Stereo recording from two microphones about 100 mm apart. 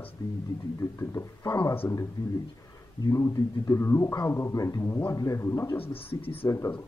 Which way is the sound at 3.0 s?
30° left (ahead or behind).